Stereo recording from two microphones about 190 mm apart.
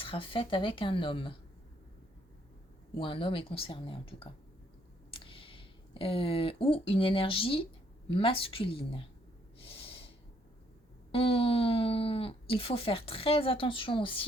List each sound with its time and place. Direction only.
0.0 s speech: 30° left (ahead or behind)
3.0 s speech: 25° left (ahead or behind)
9.6 s snort: 30° left (ahead or behind)
11.1 s speech: 30° left (ahead or behind)